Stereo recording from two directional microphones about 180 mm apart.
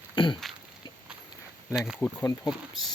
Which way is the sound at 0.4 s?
Centre (ahead or behind).